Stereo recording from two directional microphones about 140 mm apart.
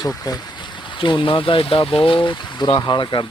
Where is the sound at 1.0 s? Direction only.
35° left (ahead or behind).